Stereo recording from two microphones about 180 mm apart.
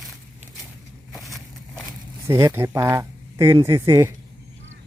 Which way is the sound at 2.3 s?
15° right (ahead or behind).